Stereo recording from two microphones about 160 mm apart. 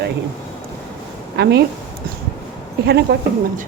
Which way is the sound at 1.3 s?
90° right.